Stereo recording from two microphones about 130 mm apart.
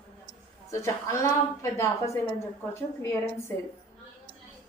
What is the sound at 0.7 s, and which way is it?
A woman's voice, 20° left (ahead or behind).